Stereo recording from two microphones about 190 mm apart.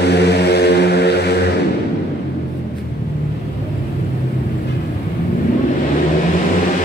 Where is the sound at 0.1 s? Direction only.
60° left (ahead or behind).